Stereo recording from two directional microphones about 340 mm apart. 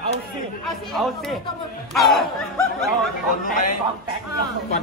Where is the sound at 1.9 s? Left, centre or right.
Centre.